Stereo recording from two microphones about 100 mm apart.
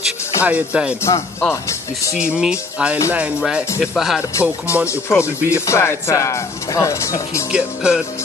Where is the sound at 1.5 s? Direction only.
30° left (ahead or behind).